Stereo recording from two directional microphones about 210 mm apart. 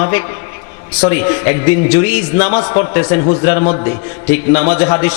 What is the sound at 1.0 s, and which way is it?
A man's voice, 15° left (ahead or behind).